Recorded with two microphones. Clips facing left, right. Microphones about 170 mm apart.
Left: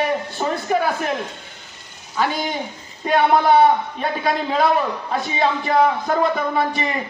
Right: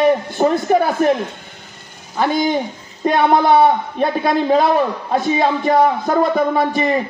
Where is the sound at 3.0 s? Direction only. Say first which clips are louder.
Right 2 dB; 45° right (ahead or behind).